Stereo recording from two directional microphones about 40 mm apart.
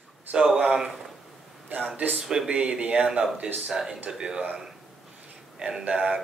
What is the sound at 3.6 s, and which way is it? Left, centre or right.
Speech, centre.